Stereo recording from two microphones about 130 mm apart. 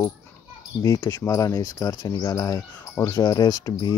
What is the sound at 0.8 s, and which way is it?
Speech, 20° left (ahead or behind).